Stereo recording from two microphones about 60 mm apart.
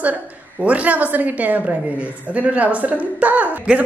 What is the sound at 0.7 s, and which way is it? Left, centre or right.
Speech, right.